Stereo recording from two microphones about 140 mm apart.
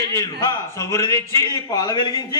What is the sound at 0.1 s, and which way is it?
A man's voice, 25° left (ahead or behind).